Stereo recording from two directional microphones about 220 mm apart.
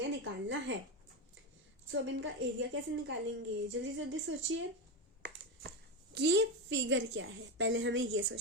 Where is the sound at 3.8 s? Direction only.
60° right (ahead or behind).